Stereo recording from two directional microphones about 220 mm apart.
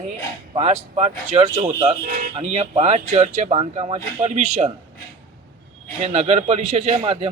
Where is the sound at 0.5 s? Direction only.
30° right (ahead or behind).